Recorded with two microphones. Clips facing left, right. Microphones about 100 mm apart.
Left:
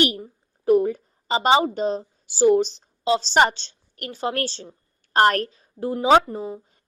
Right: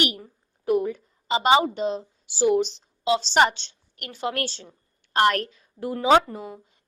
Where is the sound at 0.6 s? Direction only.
35° left (ahead or behind).